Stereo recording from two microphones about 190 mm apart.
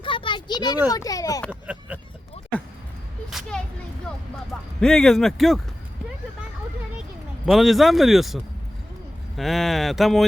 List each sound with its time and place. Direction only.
0.0 s a sound: 25° left (ahead or behind)
0.9 s speech: 20° left (ahead or behind)
1.5 s speech: 5° right (ahead or behind)
3.2 s a sound: centre (ahead or behind)
4.8 s speech: 5° left (ahead or behind)
7.4 s speech: centre (ahead or behind)